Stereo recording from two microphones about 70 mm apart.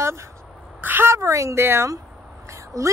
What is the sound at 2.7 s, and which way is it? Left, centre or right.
Speech, right.